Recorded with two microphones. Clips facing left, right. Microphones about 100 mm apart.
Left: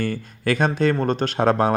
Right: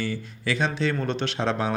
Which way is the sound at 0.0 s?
50° left (ahead or behind).